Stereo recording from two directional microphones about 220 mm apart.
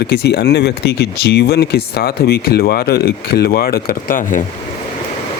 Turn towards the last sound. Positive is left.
turn(degrees=40)  # may be behind; listen again after turning